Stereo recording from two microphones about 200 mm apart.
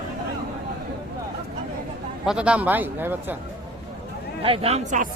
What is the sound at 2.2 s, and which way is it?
A man's voice, 5° right (ahead or behind).